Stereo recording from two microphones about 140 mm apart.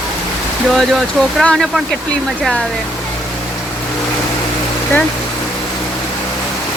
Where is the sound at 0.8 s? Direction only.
Centre (ahead or behind).